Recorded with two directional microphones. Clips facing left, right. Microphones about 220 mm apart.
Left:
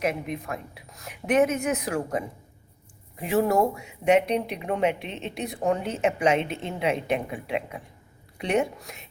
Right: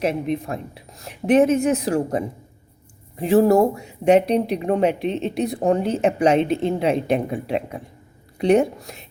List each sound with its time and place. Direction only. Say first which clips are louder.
0.0 s speech: right 6 dB; 30° right (ahead or behind)